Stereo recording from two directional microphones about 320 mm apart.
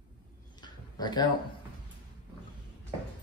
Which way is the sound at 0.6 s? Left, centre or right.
Centre.